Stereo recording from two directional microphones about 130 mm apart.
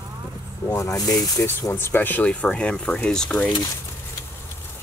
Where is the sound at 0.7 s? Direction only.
25° left (ahead or behind); by 3.5 s 5° left (ahead or behind).